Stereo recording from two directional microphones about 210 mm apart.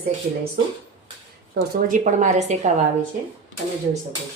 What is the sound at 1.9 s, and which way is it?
Speech, 35° right (ahead or behind).